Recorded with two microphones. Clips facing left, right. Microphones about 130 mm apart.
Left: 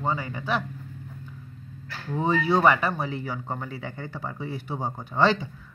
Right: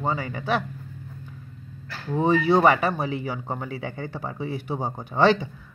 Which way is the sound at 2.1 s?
20° right (ahead or behind).